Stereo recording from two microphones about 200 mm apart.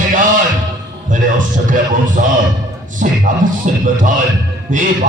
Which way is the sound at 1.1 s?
40° right (ahead or behind).